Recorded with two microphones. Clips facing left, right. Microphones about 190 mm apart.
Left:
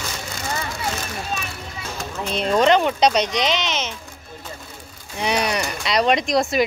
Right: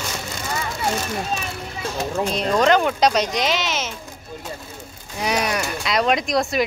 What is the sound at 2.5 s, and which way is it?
Speech, centre (ahead or behind).